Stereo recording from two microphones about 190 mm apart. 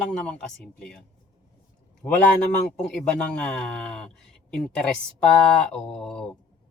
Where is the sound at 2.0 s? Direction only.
20° left (ahead or behind).